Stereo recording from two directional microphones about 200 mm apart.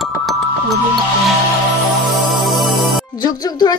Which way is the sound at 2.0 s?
Centre (ahead or behind).